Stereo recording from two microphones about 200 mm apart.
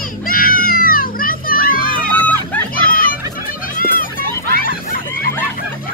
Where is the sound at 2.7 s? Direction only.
45° left (ahead or behind).